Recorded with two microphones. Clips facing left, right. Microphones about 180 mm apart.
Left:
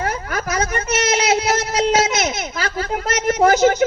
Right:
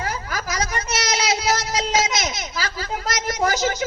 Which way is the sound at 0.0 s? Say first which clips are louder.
Left 5 dB; 55° left (ahead or behind).